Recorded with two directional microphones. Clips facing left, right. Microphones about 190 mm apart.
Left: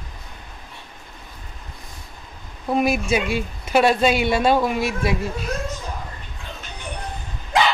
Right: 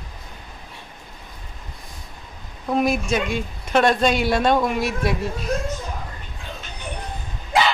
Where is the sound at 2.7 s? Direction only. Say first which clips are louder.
Left 1 dB; 5° left (ahead or behind).